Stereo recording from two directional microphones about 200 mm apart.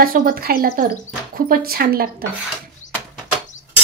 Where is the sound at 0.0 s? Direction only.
45° right (ahead or behind).